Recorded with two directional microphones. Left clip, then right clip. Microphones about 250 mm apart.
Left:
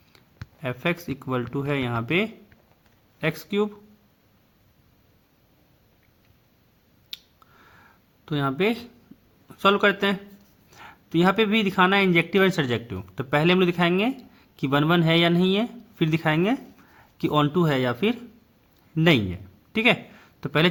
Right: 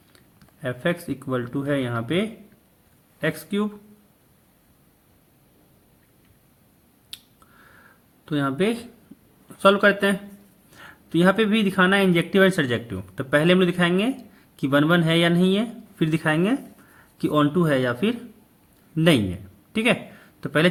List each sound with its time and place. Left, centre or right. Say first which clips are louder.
0.6 s speech: right 2 dB; left
7.1 s a sound: left 2 dB; left
9.5 s a man's voice: right 3 dB; left